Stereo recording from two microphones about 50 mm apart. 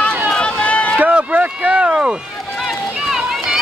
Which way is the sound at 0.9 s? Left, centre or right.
Right.